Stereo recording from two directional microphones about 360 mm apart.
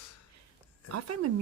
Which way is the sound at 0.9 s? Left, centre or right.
Right.